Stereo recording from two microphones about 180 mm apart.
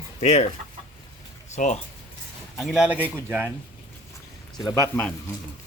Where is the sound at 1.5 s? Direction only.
40° left (ahead or behind).